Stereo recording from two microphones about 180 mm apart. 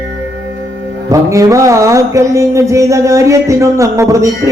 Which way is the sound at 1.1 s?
15° right (ahead or behind).